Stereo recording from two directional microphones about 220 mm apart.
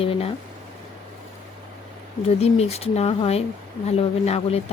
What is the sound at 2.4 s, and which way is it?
Speech, 30° left (ahead or behind).